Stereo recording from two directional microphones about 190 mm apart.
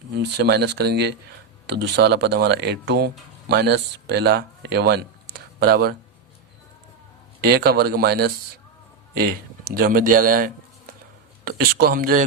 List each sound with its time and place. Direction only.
0.1 s speech: 60° right (ahead or behind)
7.4 s speech: 55° right (ahead or behind)